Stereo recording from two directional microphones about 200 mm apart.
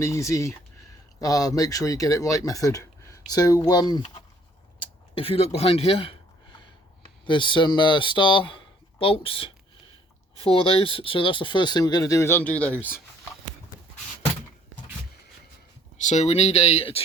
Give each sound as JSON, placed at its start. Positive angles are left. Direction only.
{"t": 0.0, "sound": "speech", "side_deg": 15}
{"t": 7.3, "sound": "speech", "side_deg": 25}
{"t": 16.0, "sound": "speech", "side_deg": 35}